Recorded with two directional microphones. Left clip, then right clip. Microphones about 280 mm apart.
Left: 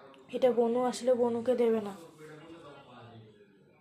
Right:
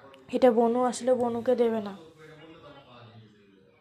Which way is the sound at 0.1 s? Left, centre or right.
Right.